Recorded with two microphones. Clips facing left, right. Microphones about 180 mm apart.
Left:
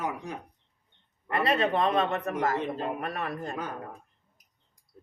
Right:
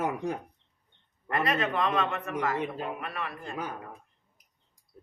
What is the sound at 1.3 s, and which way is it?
A man's voice, 30° left (ahead or behind).